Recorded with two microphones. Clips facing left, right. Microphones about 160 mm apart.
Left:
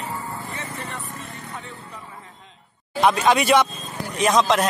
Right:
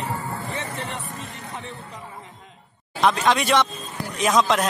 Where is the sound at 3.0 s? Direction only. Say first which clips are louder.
Left 2 dB; 5° left (ahead or behind).